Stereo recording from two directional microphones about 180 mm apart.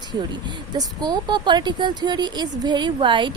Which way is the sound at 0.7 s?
20° right (ahead or behind).